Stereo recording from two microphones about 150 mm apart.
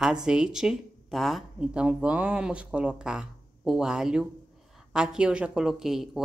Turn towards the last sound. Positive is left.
turn(degrees=0)  # may be behind; listen again after turning